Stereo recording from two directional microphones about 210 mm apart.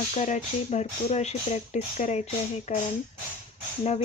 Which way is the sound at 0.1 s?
35° left (ahead or behind).